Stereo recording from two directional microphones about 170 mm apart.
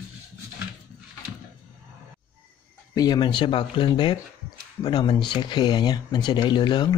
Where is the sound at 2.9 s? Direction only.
25° left (ahead or behind).